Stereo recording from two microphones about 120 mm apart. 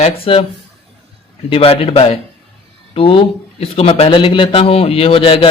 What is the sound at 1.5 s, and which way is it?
Speech, 50° left (ahead or behind).